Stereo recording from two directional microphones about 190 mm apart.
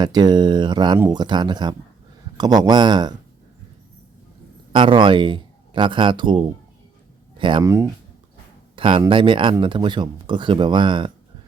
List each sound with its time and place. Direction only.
0.0 s speech: 20° right (ahead or behind)
4.7 s speech: 25° right (ahead or behind)
8.7 s speech: 25° right (ahead or behind)